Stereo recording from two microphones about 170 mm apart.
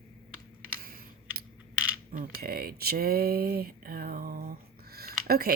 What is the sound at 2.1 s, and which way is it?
Speech, 60° right (ahead or behind).